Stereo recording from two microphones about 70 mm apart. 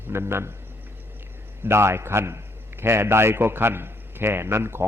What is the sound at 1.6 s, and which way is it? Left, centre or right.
A man's voice, right.